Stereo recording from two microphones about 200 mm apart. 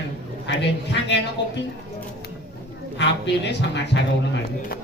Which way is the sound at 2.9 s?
60° left (ahead or behind).